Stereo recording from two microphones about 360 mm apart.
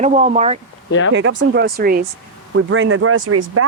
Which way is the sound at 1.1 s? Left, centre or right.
Right.